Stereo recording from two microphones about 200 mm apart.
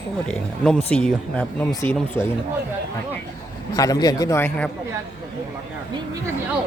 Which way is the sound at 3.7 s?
20° left (ahead or behind).